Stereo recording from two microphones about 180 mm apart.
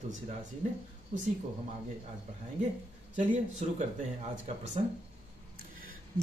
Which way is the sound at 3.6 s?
40° right (ahead or behind).